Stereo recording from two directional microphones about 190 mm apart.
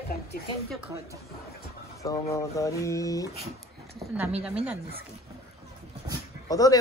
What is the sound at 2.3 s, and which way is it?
Speech, 15° left (ahead or behind).